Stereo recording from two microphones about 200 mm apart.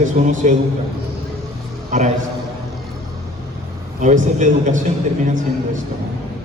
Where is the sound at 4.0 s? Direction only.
40° right (ahead or behind).